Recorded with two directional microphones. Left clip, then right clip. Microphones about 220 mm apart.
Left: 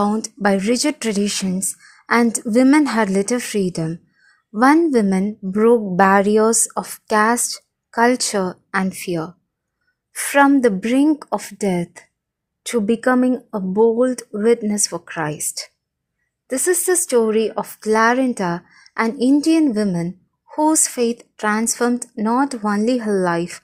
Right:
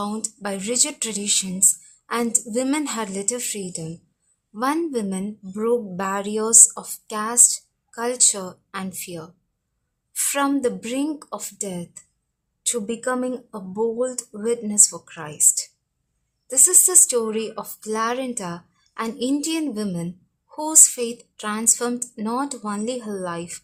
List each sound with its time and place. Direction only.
0.0 s speech: 30° left (ahead or behind)